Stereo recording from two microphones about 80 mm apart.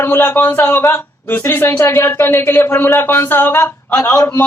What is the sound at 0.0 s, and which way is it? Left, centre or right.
Speech, left.